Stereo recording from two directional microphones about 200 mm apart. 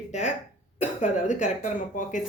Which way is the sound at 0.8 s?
35° left (ahead or behind).